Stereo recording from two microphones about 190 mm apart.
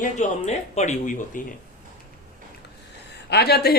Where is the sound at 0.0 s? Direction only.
35° left (ahead or behind).